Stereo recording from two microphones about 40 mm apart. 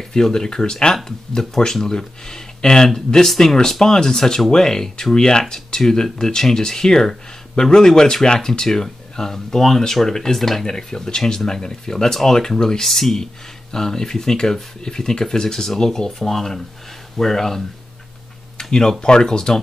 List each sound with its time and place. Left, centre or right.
0.1 s speech: centre